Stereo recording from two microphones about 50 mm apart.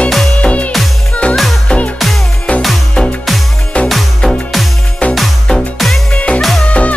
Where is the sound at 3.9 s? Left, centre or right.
Centre.